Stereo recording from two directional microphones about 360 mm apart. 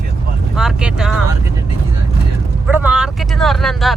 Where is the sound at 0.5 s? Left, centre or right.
Centre.